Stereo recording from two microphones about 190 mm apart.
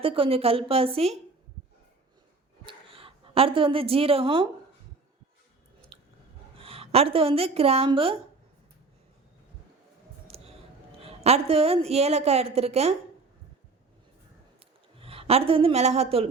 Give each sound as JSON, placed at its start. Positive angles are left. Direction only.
{"t": 0.0, "sound": "a woman's voice", "side_deg": -30}
{"t": 2.6, "sound": "a woman's voice", "side_deg": -30}
{"t": 5.9, "sound": "chewing", "side_deg": -30}
{"t": 6.6, "sound": "a woman's voice", "side_deg": -30}
{"t": 10.2, "sound": "a sound", "side_deg": -30}
{"t": 11.0, "sound": "a woman's voice", "side_deg": -30}
{"t": 14.9, "sound": "a woman's voice", "side_deg": -30}